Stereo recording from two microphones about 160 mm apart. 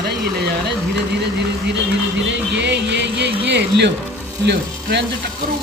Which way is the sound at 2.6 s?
90° right.